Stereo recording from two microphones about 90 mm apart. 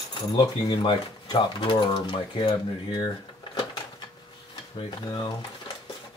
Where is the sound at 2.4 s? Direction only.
50° left (ahead or behind).